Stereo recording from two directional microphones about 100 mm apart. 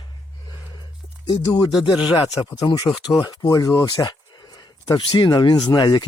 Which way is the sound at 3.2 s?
40° left (ahead or behind).